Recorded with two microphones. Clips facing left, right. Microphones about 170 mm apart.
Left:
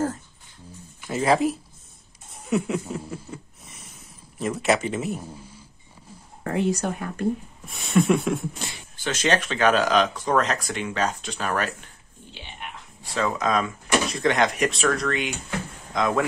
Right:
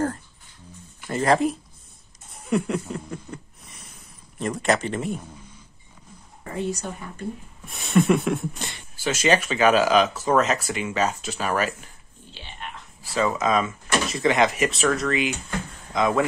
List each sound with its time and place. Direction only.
1.0 s speech: 5° left (ahead or behind)
2.5 s a sound: centre (ahead or behind)
6.4 s speech: 70° left (ahead or behind)
7.6 s speech: centre (ahead or behind)
12.4 s whispering: 15° left (ahead or behind)
13.1 s speech: 5° right (ahead or behind)